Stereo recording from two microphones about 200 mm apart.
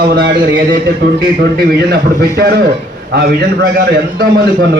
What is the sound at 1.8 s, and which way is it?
A man's voice, 55° right (ahead or behind).